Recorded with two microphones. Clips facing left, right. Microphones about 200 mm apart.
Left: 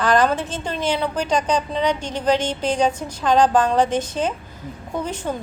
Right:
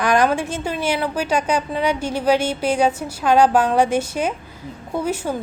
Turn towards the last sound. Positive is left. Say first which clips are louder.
# right 3 dB
turn(degrees=-10)  # may be behind; listen again after turning